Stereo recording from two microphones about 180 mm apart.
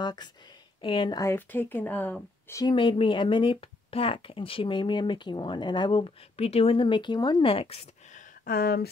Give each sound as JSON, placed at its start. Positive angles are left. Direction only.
{"t": 0.0, "sound": "speech", "side_deg": 25}
{"t": 2.5, "sound": "speech", "side_deg": 25}
{"t": 8.5, "sound": "speech", "side_deg": 55}